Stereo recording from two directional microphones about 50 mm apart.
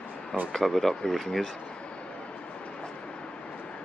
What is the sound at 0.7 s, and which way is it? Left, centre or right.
Speech, centre.